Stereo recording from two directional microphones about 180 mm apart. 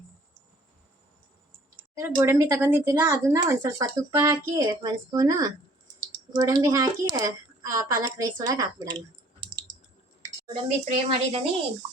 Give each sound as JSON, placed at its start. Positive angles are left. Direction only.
{"t": 2.0, "sound": "speech", "side_deg": -15}
{"t": 10.4, "sound": "speech", "side_deg": -35}